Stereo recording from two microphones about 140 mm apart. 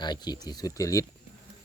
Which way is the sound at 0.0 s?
30° left (ahead or behind).